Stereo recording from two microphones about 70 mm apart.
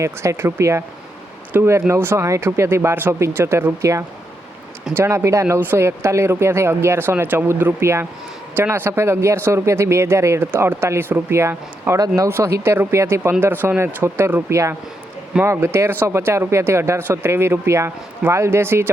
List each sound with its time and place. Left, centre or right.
0.0 s speech: right
4.9 s speech: right
10.4 s speech: right
11.9 s speech: right
12.3 s speech: right
13.4 s speech: right
15.4 s speech: right